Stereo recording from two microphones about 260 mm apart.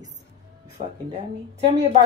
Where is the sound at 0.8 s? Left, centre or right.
Right.